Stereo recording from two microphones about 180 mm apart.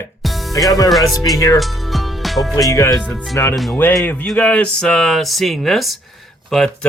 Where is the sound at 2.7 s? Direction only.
15° left (ahead or behind).